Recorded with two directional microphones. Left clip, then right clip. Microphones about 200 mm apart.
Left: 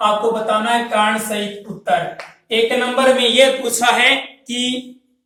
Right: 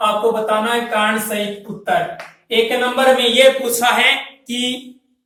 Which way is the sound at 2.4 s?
25° left (ahead or behind).